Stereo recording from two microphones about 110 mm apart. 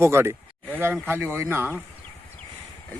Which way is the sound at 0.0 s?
25° right (ahead or behind).